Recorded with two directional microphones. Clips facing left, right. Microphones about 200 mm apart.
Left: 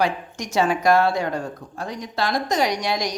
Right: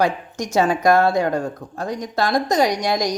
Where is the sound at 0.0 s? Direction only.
45° right (ahead or behind).